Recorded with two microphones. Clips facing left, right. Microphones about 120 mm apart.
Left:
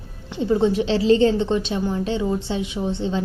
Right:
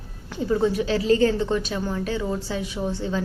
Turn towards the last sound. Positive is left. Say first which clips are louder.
# left 2 dB
turn(degrees=25)  # may be behind; listen again after turning